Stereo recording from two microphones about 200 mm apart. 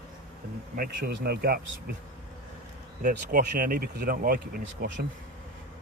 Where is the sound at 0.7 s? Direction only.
45° right (ahead or behind).